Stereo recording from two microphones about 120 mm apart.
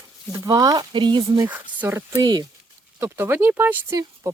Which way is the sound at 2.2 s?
35° right (ahead or behind).